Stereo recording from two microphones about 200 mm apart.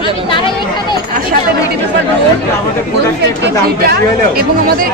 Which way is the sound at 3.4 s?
50° right (ahead or behind).